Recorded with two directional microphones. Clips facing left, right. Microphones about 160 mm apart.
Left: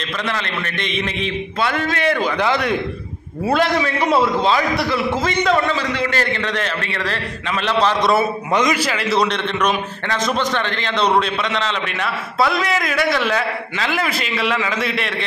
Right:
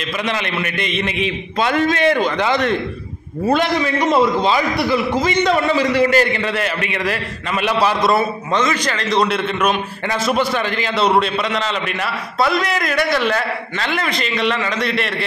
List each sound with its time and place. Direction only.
0.3 s a man's voice: 15° right (ahead or behind)
0.7 s a man's voice: 5° right (ahead or behind)
1.6 s a man's voice: 20° right (ahead or behind)
2.2 s a man's voice: 5° left (ahead or behind); by 8.1 s 10° right (ahead or behind)
8.5 s a man's voice: 10° left (ahead or behind)
9.3 s a man's voice: 5° right (ahead or behind)